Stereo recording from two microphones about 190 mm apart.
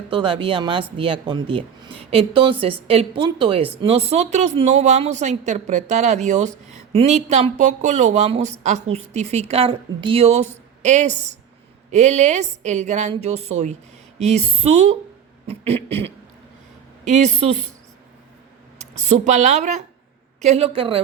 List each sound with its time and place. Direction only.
0.1 s a woman's voice: 30° right (ahead or behind)
18.8 s speech: 35° right (ahead or behind)